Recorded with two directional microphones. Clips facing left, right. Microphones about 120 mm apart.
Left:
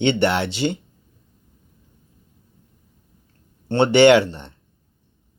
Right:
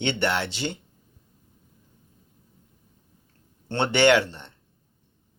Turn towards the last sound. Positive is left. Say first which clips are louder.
# left 6 dB
turn(degrees=15)  # may be behind; listen again after turning